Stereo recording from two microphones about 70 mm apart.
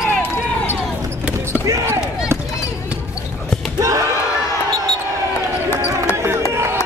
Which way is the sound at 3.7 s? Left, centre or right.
Right.